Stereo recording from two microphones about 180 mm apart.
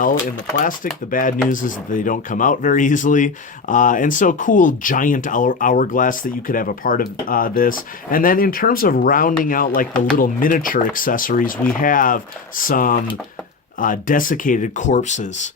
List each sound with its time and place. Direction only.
1.1 s speech: 50° left (ahead or behind)